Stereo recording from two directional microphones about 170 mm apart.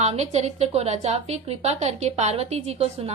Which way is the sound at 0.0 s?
40° right (ahead or behind).